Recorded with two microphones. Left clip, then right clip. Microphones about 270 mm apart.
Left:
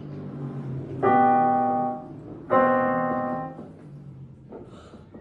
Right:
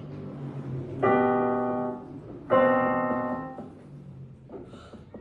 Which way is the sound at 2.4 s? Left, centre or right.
Centre.